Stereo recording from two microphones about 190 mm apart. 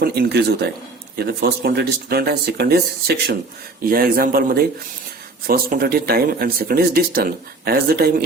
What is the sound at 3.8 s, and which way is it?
Speech, 50° right (ahead or behind).